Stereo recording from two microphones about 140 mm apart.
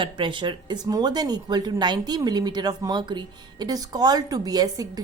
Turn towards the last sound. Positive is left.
turn(degrees=-25)  # may be behind; listen again after turning